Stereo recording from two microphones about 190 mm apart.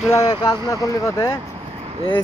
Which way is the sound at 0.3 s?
20° left (ahead or behind).